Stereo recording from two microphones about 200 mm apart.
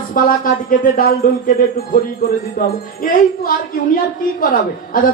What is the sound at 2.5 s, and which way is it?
Speech, 45° left (ahead or behind).